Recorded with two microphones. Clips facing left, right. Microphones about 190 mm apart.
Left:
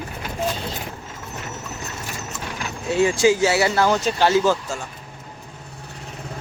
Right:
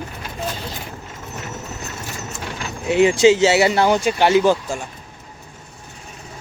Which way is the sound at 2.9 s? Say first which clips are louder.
Right 4 dB; 20° right (ahead or behind).